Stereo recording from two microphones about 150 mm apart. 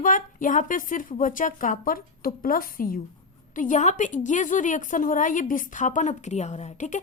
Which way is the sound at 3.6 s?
55° left (ahead or behind).